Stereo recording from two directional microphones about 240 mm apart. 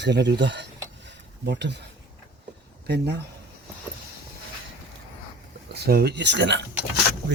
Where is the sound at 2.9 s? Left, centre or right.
Right.